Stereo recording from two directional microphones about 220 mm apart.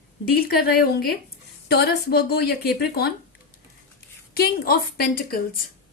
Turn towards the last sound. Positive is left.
turn(degrees=40)  # may be behind; listen again after turning